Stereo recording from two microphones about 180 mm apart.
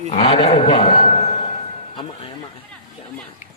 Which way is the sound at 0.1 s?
30° left (ahead or behind).